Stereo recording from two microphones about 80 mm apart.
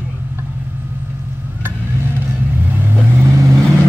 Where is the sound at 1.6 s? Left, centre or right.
Right.